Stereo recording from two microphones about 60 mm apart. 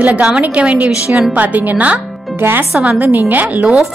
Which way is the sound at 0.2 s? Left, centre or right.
Centre.